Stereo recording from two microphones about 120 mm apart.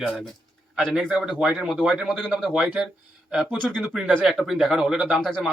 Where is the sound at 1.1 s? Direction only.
5° right (ahead or behind).